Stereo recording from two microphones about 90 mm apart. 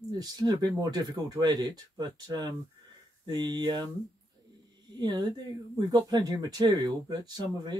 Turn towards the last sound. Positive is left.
turn(degrees=-50)  # may be behind; listen again after turning